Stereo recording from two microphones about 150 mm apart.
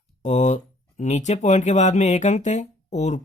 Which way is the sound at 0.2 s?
55° left (ahead or behind).